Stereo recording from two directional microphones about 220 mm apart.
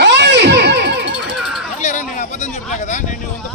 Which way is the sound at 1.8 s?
35° left (ahead or behind).